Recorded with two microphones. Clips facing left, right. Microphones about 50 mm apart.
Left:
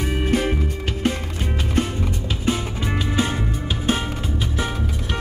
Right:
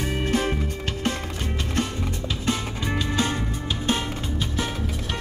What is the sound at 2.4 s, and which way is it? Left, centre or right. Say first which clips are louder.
Music: left 3 dB; centre.